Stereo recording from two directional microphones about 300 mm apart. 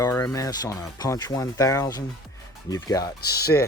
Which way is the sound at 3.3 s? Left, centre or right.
Left.